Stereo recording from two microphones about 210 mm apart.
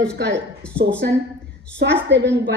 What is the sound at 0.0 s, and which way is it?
Speech, 55° right (ahead or behind).